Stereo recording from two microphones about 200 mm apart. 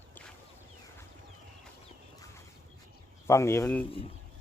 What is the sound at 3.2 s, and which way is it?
Speech, 15° left (ahead or behind).